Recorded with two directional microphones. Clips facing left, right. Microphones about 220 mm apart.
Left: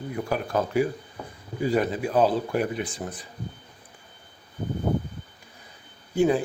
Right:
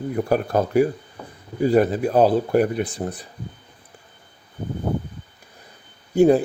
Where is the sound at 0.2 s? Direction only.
40° right (ahead or behind).